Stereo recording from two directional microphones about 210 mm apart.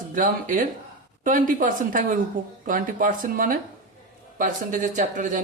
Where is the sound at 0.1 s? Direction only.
40° right (ahead or behind).